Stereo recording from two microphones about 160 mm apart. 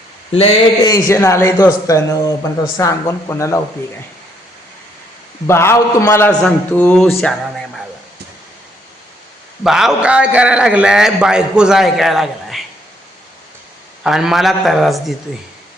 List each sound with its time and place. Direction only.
0.9 s a man's voice: 20° left (ahead or behind)
5.5 s a man's voice: 15° left (ahead or behind)
9.6 s a man's voice: 5° right (ahead or behind)
14.0 s a man's voice: 5° right (ahead or behind)